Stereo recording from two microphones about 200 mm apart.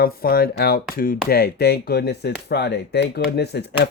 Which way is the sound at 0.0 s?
50° left (ahead or behind).